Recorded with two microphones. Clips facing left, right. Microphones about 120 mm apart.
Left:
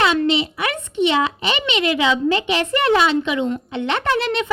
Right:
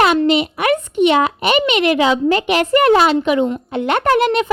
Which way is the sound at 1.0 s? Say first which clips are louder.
Right 4 dB; 50° right (ahead or behind).